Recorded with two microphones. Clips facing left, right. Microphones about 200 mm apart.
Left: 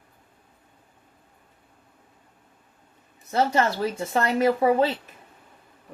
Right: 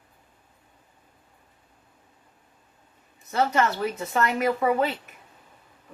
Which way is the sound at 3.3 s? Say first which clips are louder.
Left 1 dB; 30° left (ahead or behind).